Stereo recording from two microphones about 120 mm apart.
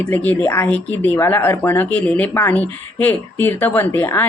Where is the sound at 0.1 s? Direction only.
15° left (ahead or behind).